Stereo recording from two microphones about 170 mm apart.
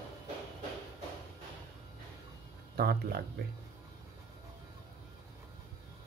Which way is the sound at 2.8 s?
65° right (ahead or behind).